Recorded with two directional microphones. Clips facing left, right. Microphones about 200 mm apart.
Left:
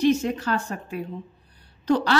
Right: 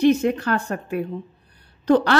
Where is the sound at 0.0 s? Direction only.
60° right (ahead or behind).